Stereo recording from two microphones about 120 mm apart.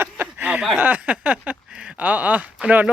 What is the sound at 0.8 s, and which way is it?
Speech, 10° right (ahead or behind).